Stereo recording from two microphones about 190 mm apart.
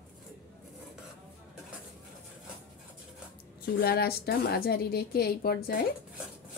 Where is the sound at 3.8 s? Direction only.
55° left (ahead or behind).